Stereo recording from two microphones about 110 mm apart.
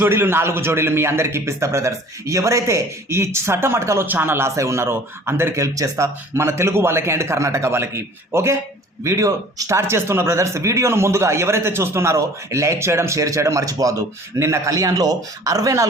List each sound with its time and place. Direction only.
0.0 s a man's voice: 20° right (ahead or behind)